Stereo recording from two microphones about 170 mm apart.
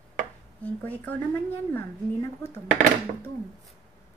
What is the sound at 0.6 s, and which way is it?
A woman's voice, 10° left (ahead or behind).